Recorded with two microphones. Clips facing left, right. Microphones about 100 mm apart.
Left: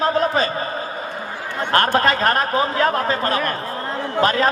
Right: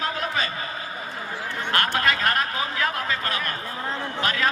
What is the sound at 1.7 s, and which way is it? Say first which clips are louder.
A man's voice: left 7 dB; 35° left (ahead or behind).